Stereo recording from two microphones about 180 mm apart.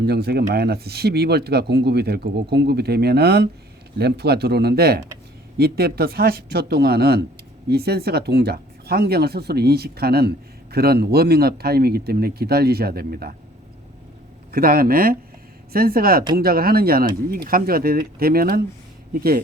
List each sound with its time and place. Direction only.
0.0 s speech: 65° right (ahead or behind)
14.5 s speech: 55° right (ahead or behind)